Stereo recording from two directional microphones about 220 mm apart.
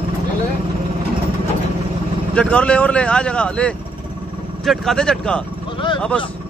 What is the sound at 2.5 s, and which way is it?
Speech, 5° left (ahead or behind).